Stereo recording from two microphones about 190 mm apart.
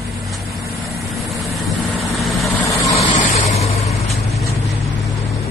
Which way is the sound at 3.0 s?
35° left (ahead or behind).